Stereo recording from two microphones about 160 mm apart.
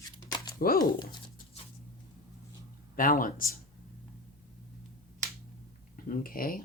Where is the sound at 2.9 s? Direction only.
60° left (ahead or behind).